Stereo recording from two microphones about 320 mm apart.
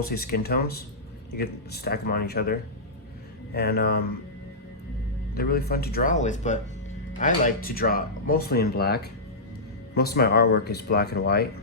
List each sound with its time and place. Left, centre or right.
0.0 s speech: left
5.3 s speech: left